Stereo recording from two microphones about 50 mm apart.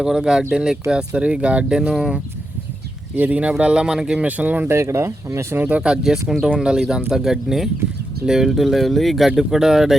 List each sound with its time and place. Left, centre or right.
0.0 s speech: centre
1.9 s speech: centre
3.2 s speech: right
4.7 s speech: right
5.5 s speech: right; by 9.9 s centre